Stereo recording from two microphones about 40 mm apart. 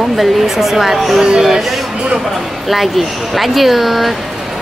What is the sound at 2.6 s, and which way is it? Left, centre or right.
Speech, centre.